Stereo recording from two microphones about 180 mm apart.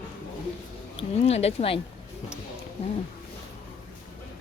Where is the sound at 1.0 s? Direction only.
35° left (ahead or behind).